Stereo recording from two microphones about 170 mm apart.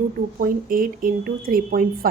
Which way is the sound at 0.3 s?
55° right (ahead or behind).